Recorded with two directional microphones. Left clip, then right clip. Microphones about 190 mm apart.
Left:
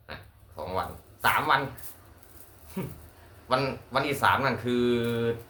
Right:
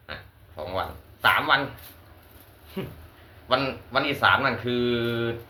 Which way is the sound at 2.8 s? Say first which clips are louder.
Right 3 dB; 15° left (ahead or behind).